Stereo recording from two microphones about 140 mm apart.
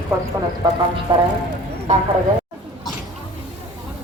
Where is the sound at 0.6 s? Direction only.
30° right (ahead or behind).